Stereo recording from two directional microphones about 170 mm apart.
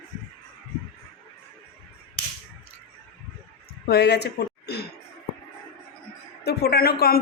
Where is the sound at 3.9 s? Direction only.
80° left.